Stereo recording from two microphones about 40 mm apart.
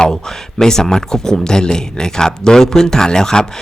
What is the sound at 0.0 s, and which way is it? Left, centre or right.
Speech, centre.